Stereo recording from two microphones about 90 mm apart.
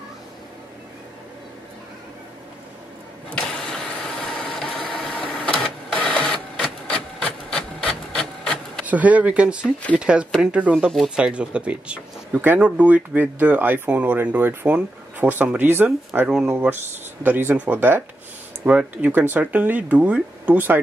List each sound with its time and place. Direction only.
3.3 s vehicle: 5° left (ahead or behind)
5.9 s printer: 10° left (ahead or behind)
8.8 s speech: 15° right (ahead or behind)